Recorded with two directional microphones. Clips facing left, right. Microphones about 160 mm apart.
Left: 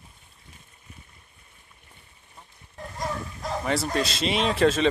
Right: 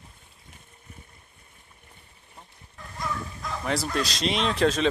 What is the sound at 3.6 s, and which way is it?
A man's voice, centre (ahead or behind).